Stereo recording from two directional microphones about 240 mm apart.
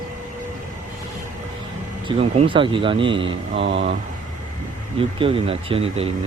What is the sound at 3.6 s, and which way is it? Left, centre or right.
Speech, right.